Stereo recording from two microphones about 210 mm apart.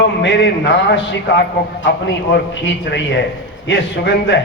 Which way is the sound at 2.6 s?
60° left (ahead or behind).